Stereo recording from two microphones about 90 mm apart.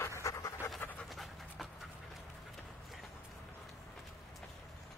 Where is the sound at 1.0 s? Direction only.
Centre (ahead or behind).